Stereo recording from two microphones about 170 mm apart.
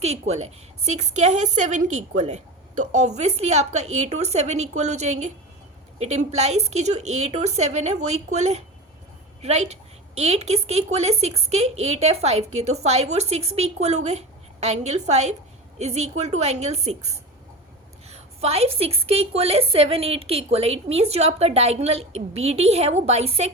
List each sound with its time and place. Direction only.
0.0 s a woman's voice: 40° right (ahead or behind)